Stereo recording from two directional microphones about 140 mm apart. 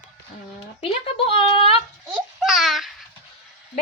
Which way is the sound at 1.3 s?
40° left (ahead or behind).